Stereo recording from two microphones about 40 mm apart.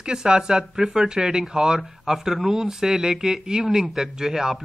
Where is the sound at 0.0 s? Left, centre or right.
Right.